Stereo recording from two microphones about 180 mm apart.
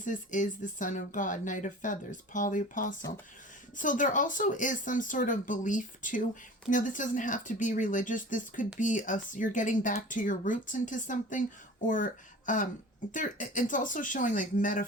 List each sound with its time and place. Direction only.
0.0 s speech: 45° left (ahead or behind)